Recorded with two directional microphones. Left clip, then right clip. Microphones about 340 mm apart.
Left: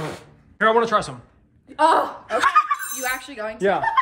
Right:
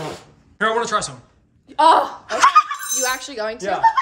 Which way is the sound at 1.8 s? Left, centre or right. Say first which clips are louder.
Right 4 dB; centre.